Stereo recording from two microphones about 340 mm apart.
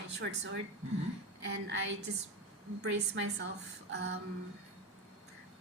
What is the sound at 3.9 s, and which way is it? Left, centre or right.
Speech, right.